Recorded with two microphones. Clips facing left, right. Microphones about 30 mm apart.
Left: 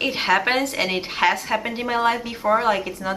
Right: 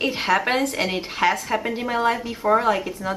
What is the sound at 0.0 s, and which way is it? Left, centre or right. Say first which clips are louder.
A woman's voice: left 1 dB; centre.